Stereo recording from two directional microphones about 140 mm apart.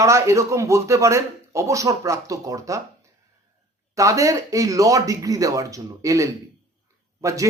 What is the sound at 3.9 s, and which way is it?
A man's voice, 25° right (ahead or behind).